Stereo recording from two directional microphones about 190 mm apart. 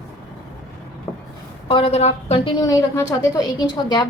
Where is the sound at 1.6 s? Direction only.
30° left (ahead or behind).